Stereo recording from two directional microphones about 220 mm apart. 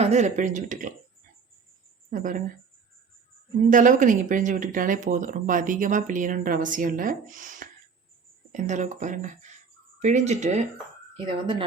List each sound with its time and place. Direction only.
0.0 s speech: 30° right (ahead or behind)
2.0 s speech: 35° right (ahead or behind)
3.7 s speech: 35° right (ahead or behind)